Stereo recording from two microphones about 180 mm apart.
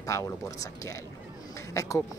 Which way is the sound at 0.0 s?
20° left (ahead or behind).